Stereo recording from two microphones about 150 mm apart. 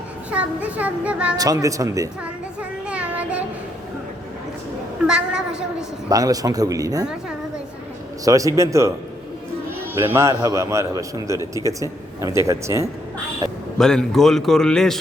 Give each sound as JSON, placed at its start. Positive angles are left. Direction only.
{"t": 0.3, "sound": "a child's voice", "side_deg": -10}
{"t": 1.4, "sound": "a man's voice", "side_deg": -20}
{"t": 2.6, "sound": "child singing", "side_deg": -10}
{"t": 5.0, "sound": "a man's voice", "side_deg": -5}
{"t": 6.1, "sound": "a man's voice", "side_deg": -25}
{"t": 8.2, "sound": "a man's voice", "side_deg": -20}
{"t": 9.9, "sound": "a man's voice", "side_deg": -15}
{"t": 13.7, "sound": "a man's voice", "side_deg": 5}